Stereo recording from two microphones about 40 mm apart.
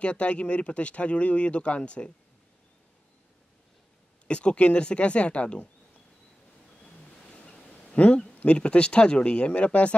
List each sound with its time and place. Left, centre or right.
0.0 s speech: left
4.3 s speech: left
7.3 s a sound: left
8.5 s speech: left